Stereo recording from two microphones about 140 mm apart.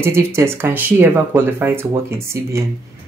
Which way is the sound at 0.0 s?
20° right (ahead or behind).